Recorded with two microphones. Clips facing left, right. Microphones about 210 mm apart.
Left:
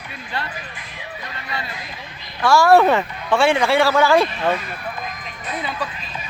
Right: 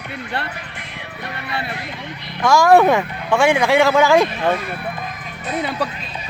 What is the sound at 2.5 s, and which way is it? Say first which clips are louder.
Speech: right 1 dB; 15° right (ahead or behind).